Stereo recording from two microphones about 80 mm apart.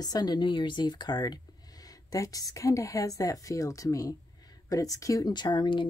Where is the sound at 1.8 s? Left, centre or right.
Left.